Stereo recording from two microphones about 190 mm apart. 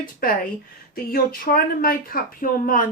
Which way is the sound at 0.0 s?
45° left (ahead or behind).